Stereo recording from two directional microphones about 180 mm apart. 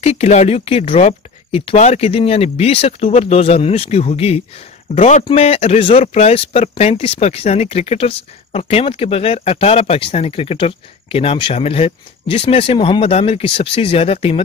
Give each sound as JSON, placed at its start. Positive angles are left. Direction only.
{"t": 0.0, "sound": "speech", "side_deg": 35}